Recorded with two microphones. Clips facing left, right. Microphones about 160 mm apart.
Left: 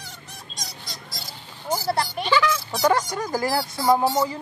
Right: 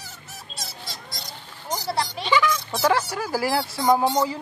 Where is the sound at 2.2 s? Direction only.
Centre (ahead or behind).